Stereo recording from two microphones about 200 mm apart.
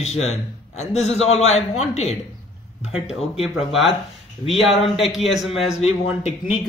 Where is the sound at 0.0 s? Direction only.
35° left (ahead or behind).